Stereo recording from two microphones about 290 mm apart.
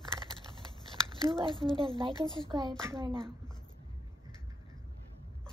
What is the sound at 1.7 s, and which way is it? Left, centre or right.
Speech, centre.